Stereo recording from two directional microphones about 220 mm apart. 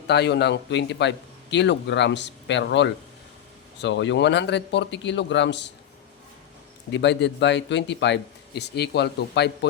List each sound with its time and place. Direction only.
0.1 s a man's voice: 50° left (ahead or behind)
6.9 s a man's voice: 50° left (ahead or behind)